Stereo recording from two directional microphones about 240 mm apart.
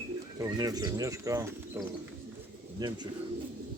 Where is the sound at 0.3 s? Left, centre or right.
Centre.